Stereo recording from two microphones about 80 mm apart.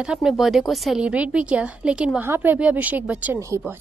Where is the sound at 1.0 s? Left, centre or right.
Centre.